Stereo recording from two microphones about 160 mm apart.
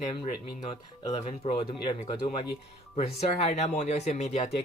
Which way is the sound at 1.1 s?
40° left (ahead or behind).